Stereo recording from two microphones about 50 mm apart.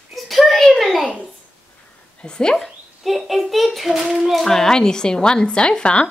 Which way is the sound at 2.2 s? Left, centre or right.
Centre.